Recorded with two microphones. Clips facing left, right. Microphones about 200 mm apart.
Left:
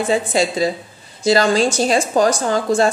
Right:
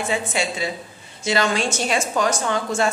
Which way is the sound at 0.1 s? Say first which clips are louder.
Left 8 dB; 35° left (ahead or behind).